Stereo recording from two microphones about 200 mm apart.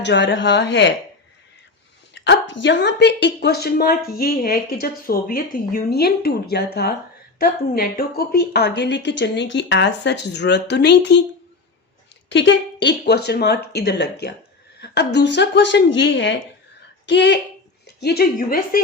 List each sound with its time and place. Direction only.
0.0 s a woman's voice: 60° left (ahead or behind)
2.1 s a woman's voice: 60° left (ahead or behind)
12.3 s a woman's voice: 65° left (ahead or behind)
18.0 s a woman's voice: 50° left (ahead or behind)